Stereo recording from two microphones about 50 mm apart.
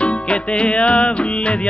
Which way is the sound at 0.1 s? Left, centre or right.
Centre.